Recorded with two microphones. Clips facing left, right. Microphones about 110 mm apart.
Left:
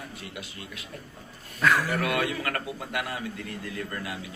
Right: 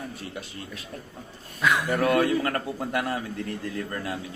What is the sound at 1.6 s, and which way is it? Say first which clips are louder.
Speech: left 1 dB; centre (ahead or behind).